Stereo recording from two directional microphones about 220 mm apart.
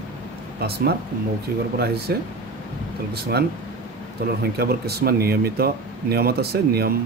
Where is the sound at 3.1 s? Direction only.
45° right (ahead or behind).